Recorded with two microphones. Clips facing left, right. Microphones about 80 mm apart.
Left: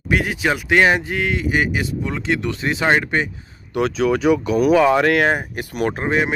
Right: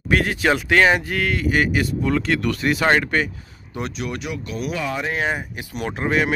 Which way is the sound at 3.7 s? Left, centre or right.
Left.